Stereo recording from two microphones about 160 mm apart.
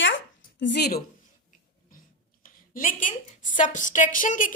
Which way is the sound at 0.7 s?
90° left.